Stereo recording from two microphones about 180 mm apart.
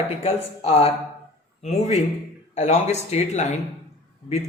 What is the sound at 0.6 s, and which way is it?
Speech, 35° left (ahead or behind).